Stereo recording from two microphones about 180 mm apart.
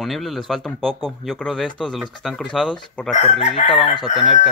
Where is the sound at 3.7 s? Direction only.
25° left (ahead or behind).